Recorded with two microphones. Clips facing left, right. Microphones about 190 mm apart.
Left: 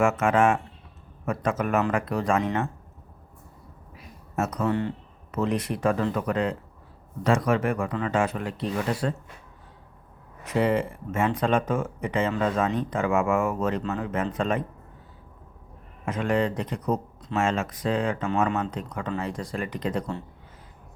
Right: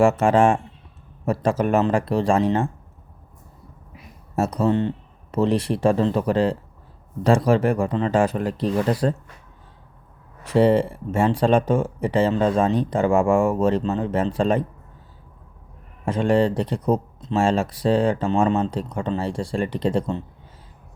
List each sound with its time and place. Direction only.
0.0 s speech: 30° right (ahead or behind)
4.4 s speech: 30° right (ahead or behind)
10.4 s speech: 30° right (ahead or behind)
16.0 s speech: 30° right (ahead or behind)